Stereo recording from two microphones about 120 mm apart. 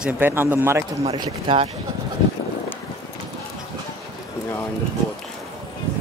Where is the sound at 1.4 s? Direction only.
50° right (ahead or behind).